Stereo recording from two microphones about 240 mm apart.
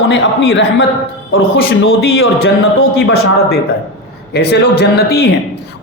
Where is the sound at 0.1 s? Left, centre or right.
Left.